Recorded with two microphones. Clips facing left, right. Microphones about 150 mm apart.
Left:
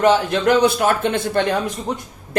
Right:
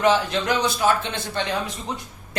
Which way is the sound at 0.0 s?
50° left (ahead or behind).